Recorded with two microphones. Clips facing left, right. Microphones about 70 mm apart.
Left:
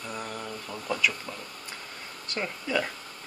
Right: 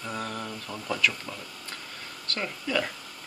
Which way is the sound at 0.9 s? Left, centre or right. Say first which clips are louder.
Even; centre.